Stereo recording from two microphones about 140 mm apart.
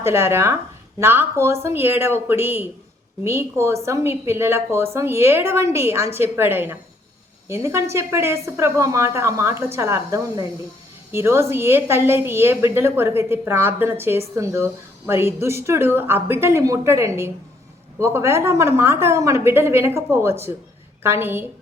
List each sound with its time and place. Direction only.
0.0 s a woman's voice: 20° right (ahead or behind)